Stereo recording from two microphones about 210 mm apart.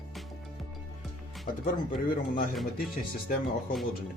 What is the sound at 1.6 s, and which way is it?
Speech, 40° left (ahead or behind).